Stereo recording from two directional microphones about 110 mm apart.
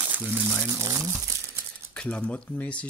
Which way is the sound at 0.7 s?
30° right (ahead or behind).